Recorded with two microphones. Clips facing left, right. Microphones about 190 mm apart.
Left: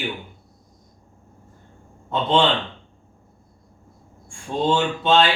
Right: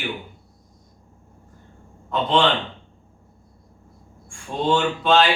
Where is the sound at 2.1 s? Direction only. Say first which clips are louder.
Left 1 dB; 25° left (ahead or behind).